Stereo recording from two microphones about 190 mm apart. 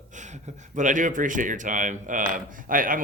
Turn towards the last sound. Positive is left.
turn(degrees=-45)  # may be behind; listen again after turning